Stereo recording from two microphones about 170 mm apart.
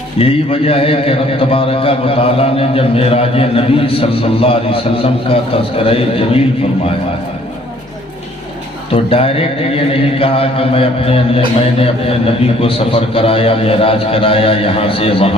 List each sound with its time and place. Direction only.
0.2 s mantra: 35° left (ahead or behind)
8.9 s mantra: 35° left (ahead or behind)